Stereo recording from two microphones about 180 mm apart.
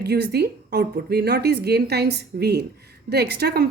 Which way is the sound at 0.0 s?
65° right (ahead or behind).